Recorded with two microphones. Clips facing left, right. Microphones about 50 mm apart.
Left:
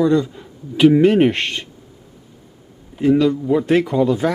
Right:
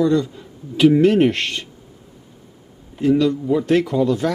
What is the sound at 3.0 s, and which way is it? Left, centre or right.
Speech, centre.